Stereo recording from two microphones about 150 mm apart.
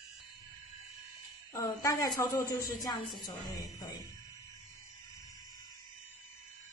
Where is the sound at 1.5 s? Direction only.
20° left (ahead or behind).